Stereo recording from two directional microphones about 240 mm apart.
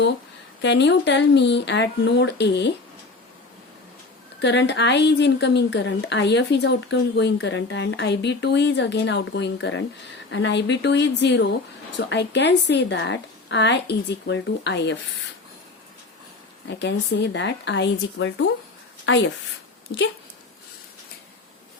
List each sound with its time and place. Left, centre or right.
0.6 s speech: left
4.4 s speech: left
16.6 s a woman's voice: left